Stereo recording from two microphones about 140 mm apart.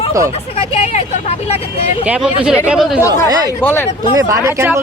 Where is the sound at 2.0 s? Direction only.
10° right (ahead or behind).